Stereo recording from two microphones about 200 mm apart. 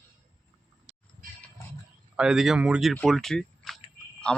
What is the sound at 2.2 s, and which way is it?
Speech, centre (ahead or behind).